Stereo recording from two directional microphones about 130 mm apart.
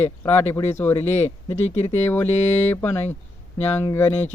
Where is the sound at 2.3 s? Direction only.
60° left (ahead or behind).